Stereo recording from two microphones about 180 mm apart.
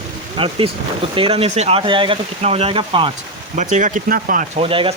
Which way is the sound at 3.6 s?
45° right (ahead or behind).